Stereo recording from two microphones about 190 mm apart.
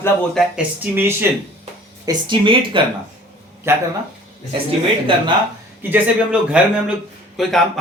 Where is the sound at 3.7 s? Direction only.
15° right (ahead or behind).